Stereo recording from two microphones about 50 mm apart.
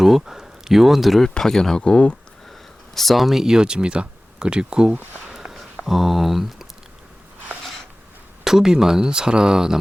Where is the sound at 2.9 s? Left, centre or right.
Centre.